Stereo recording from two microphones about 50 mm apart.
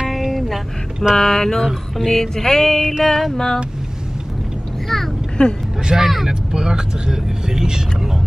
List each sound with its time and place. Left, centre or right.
0.0 s music: centre
1.1 s speech: centre
1.7 s music: centre
4.8 s a sound: centre
5.4 s speech: left
5.9 s speech: centre